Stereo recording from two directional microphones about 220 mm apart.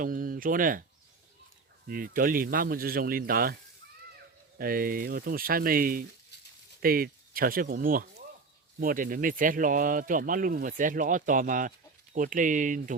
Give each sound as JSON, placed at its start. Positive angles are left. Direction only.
{"t": 0.0, "sound": "speech", "side_deg": -40}
{"t": 1.9, "sound": "speech", "side_deg": -40}
{"t": 6.3, "sound": "a sound", "side_deg": 50}
{"t": 6.8, "sound": "speech", "side_deg": -40}